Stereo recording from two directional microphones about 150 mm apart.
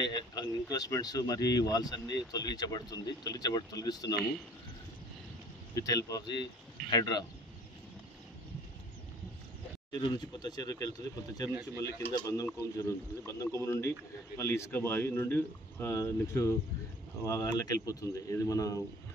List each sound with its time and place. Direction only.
0.0 s speech: 25° left (ahead or behind)
5.8 s speech: 20° left (ahead or behind)
9.9 s speech: 30° left (ahead or behind)
12.1 s speech: 25° left (ahead or behind)